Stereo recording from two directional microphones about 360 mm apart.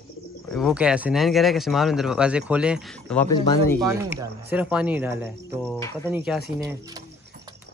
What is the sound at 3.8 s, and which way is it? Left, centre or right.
Speech, centre.